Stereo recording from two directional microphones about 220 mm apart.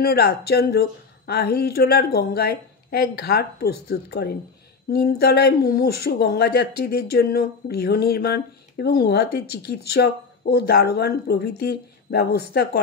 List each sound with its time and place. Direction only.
0.0 s speech: 45° left (ahead or behind)